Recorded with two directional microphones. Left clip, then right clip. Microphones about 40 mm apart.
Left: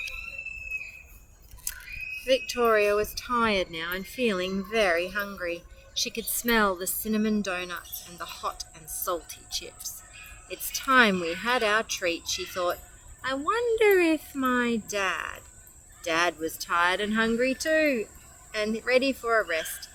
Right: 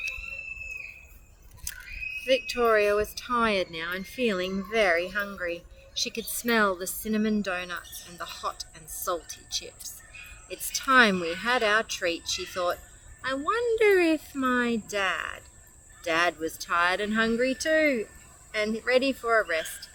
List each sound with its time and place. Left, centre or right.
1.7 s a sound: centre
2.7 s speech: centre
4.7 s speech: centre